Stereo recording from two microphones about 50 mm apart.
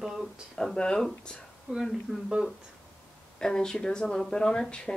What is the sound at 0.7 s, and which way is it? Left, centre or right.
Speech, centre.